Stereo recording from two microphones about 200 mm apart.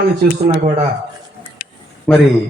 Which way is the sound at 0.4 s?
30° right (ahead or behind).